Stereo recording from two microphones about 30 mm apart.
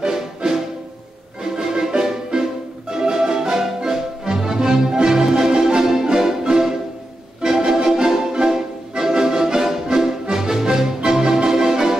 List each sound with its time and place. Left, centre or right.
0.0 s music: centre